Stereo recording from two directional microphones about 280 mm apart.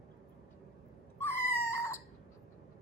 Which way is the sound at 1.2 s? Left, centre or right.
Centre.